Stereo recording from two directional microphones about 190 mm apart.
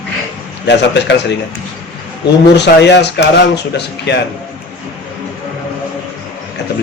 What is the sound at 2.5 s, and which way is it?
Speech, 65° left (ahead or behind).